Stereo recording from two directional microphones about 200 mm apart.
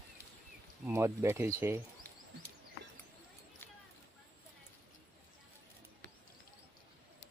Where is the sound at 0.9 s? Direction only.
15° right (ahead or behind).